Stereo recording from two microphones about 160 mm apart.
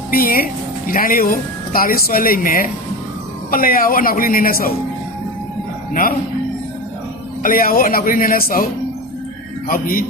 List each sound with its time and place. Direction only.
0.1 s speech: 65° left (ahead or behind)
5.9 s speech: 60° left (ahead or behind)
7.4 s speech: 65° left (ahead or behind)
9.6 s speech: 65° left (ahead or behind)